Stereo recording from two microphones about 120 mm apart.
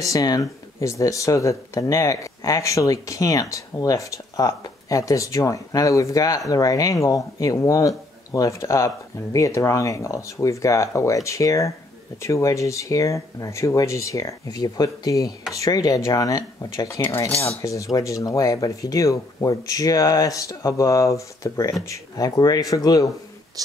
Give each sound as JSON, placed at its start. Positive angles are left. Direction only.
{"t": 0.0, "sound": "speech", "side_deg": 30}